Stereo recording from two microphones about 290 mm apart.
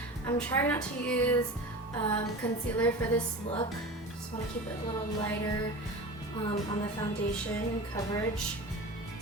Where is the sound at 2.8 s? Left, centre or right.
Centre.